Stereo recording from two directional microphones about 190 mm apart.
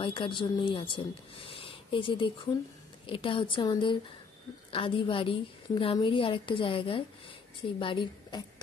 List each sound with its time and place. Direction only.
0.0 s a woman's voice: 25° left (ahead or behind)